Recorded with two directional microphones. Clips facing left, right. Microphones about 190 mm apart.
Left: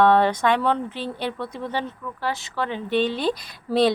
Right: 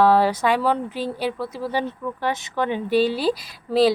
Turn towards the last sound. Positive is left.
turn(degrees=-5)  # may be behind; listen again after turning